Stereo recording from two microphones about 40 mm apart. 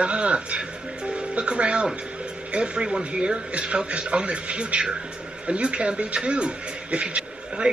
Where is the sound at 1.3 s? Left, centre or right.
Right.